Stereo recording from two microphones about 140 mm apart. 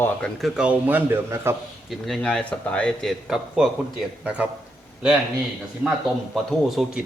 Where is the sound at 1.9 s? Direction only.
5° left (ahead or behind).